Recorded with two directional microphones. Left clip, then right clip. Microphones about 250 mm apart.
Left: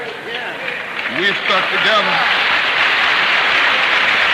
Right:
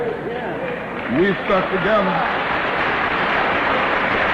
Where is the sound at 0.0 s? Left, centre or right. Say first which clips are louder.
Even; centre.